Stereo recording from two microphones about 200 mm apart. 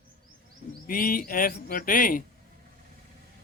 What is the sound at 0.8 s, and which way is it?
A man's voice, 45° left (ahead or behind).